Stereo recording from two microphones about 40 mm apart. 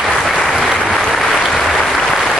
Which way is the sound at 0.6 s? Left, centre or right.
Centre.